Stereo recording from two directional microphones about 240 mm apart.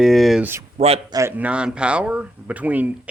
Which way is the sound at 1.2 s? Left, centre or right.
Centre.